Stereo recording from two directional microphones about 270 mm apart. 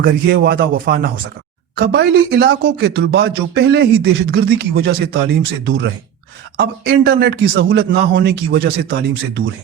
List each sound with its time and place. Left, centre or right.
0.0 s speech: right